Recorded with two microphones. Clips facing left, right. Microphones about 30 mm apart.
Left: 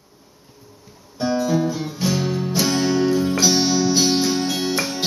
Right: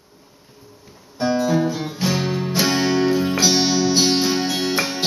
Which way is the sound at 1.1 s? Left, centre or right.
Centre.